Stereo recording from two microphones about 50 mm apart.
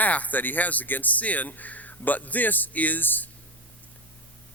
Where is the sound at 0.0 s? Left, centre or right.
Left.